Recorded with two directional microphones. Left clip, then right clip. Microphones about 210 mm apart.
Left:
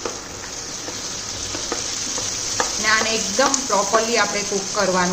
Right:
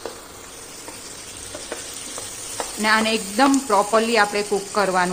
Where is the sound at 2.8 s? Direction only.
50° right (ahead or behind).